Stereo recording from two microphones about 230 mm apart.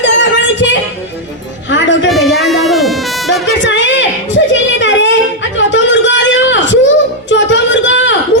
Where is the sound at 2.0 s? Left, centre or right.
Centre.